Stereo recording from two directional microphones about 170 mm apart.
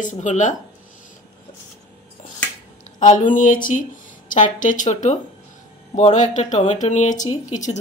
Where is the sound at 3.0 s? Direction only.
50° left (ahead or behind).